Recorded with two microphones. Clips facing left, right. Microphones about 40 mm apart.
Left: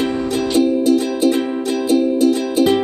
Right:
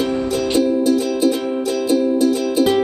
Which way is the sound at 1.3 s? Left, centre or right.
Left.